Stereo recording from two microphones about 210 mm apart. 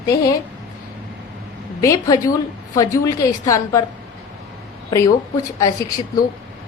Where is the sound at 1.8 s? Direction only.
15° left (ahead or behind).